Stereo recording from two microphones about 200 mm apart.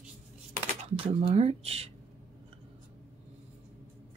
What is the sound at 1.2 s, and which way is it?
Speech, 30° right (ahead or behind).